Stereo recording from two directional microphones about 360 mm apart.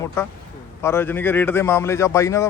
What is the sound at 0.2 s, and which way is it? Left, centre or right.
Speech, centre.